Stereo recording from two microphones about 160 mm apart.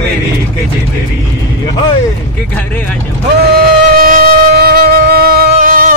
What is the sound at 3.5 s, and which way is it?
Music, 70° right (ahead or behind).